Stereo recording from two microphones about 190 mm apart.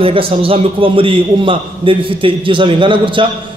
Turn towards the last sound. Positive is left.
turn(degrees=-25)  # may be behind; listen again after turning